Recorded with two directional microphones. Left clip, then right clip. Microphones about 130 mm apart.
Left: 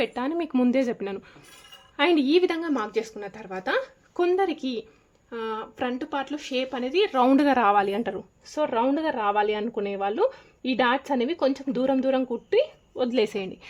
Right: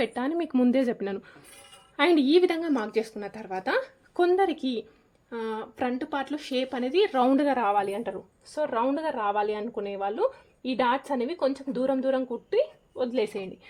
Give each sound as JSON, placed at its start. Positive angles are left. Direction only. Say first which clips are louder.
{"t": 0.0, "sound": "speech", "louder": "left 1 dB", "side_deg": -10}
{"t": 7.4, "sound": "speech", "louder": "left 4 dB", "side_deg": 45}